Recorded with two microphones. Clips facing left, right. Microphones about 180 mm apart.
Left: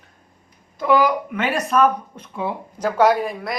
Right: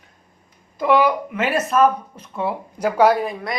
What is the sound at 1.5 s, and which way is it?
Speech, 5° right (ahead or behind).